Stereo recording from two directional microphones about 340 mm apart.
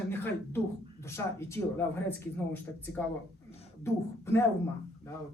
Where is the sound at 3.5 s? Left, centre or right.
Centre.